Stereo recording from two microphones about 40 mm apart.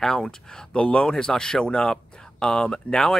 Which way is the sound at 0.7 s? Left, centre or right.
Left.